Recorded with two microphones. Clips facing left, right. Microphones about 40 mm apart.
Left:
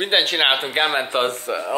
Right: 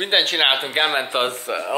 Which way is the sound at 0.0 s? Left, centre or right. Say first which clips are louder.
Even; centre.